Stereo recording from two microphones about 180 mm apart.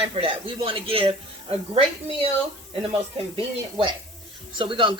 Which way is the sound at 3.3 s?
30° right (ahead or behind).